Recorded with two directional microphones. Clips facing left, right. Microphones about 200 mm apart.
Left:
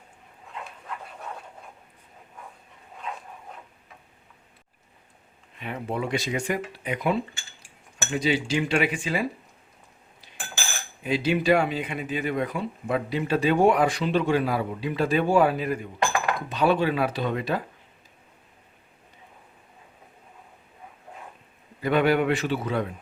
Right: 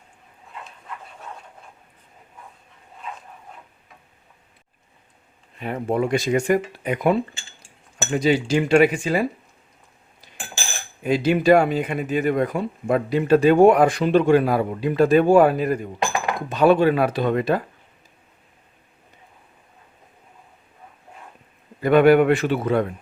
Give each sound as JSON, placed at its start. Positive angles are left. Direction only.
{"t": 5.5, "sound": "a man's voice", "side_deg": -45}
{"t": 11.0, "sound": "a man's voice", "side_deg": -50}
{"t": 21.8, "sound": "a man's voice", "side_deg": -50}